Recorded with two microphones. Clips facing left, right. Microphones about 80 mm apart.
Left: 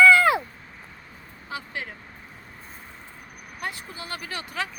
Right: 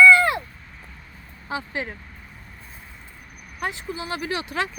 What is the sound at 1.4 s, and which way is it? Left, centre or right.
Vehicle, right.